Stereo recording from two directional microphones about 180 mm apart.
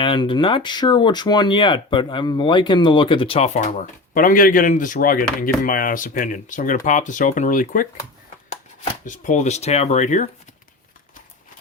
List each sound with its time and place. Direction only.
0.0 s speech: 30° left (ahead or behind)